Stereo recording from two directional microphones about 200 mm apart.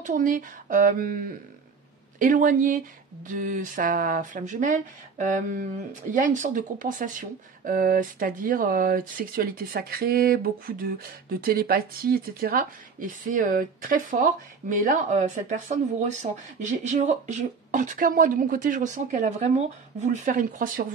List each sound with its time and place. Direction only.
0.0 s a woman's voice: 40° right (ahead or behind)